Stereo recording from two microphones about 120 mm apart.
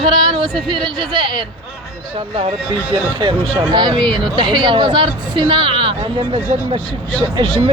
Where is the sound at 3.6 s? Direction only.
40° right (ahead or behind).